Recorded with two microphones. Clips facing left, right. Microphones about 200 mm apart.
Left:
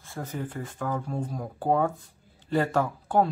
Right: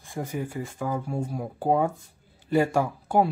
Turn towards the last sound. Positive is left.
turn(degrees=-10)  # may be behind; listen again after turning